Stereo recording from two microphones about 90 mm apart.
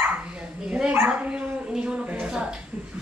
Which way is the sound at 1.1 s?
10° right (ahead or behind).